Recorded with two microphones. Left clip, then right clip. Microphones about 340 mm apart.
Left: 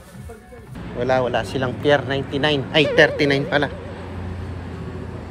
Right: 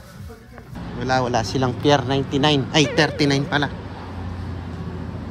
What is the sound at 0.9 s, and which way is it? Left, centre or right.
Speech, centre.